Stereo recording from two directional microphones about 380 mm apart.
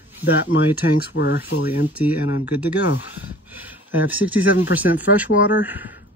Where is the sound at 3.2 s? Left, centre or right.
Centre.